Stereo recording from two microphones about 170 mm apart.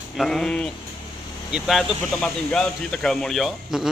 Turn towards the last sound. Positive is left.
turn(degrees=0)  # may be behind; listen again after turning